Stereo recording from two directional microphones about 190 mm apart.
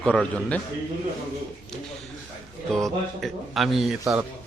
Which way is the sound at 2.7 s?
Centre (ahead or behind).